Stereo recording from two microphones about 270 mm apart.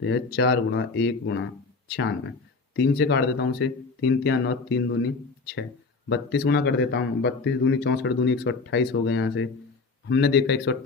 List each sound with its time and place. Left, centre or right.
0.0 s a man's voice: left